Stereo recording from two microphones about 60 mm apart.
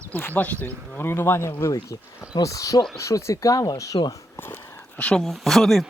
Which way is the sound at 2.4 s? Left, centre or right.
Left.